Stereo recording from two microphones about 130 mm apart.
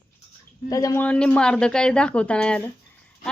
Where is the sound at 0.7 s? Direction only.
25° left (ahead or behind).